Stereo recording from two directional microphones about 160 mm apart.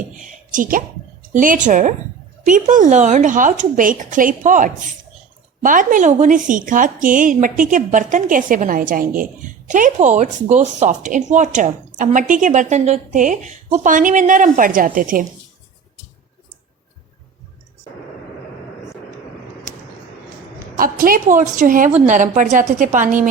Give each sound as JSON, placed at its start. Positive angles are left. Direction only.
{"t": 0.2, "sound": "a woman's voice", "side_deg": -55}
{"t": 20.7, "sound": "a woman's voice", "side_deg": -60}